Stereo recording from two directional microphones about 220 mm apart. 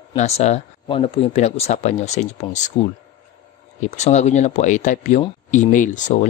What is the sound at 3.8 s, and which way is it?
Speech, 30° left (ahead or behind).